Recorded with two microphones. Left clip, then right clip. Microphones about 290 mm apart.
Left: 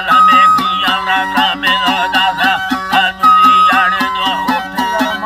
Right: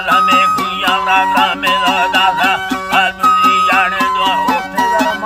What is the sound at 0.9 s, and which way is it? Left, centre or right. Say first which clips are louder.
Music: right 2 dB; centre.